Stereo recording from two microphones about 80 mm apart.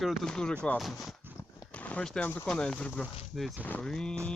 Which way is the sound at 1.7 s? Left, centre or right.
Centre.